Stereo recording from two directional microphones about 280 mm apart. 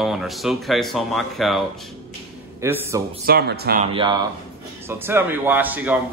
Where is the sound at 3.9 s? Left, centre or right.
Centre.